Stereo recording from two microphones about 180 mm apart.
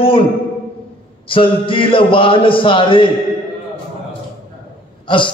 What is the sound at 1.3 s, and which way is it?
A man's voice, 30° left (ahead or behind).